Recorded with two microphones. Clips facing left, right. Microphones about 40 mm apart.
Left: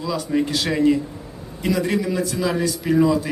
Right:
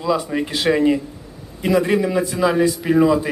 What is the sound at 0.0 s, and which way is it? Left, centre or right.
A man's voice, right.